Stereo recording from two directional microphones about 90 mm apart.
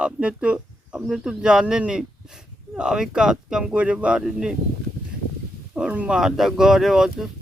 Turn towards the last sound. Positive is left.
turn(degrees=-5)  # may be behind; listen again after turning